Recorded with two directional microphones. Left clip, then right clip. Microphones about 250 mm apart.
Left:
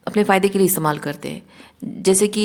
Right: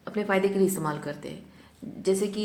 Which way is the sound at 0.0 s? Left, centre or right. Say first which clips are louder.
Left 9 dB; left.